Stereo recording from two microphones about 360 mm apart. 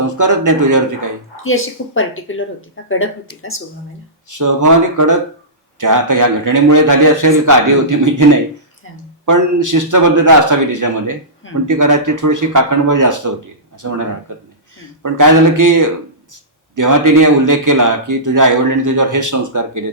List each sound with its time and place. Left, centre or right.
0.2 s a man's voice: right
1.5 s speech: left
4.3 s a man's voice: right
9.2 s a man's voice: right